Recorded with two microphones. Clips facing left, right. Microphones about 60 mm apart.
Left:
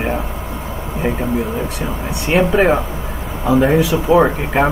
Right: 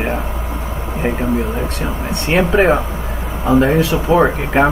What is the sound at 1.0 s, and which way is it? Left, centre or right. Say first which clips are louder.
Speech: even; right.